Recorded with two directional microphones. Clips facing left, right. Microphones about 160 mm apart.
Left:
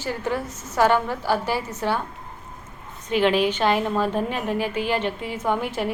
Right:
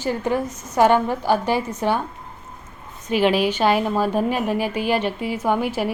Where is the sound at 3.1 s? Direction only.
10° right (ahead or behind).